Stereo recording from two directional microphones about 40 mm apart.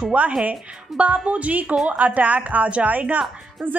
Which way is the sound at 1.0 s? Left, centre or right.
Right.